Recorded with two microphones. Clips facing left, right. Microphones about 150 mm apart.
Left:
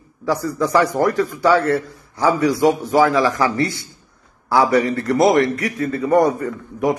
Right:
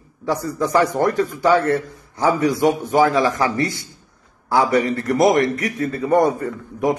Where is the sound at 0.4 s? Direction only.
20° right (ahead or behind).